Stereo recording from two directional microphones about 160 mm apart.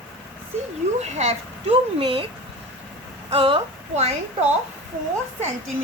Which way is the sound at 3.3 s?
35° right (ahead or behind).